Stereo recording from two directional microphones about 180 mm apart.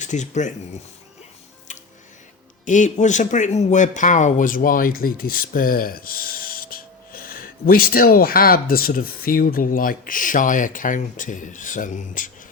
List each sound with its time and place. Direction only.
0.0 s speech: 40° left (ahead or behind)
2.6 s speech: 45° left (ahead or behind)